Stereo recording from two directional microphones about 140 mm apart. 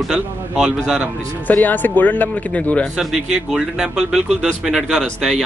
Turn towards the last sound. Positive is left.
turn(degrees=-5)  # may be behind; listen again after turning